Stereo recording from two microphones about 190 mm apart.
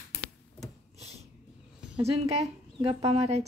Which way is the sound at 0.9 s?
35° right (ahead or behind).